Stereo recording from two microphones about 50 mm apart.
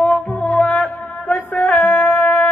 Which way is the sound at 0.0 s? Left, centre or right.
Left.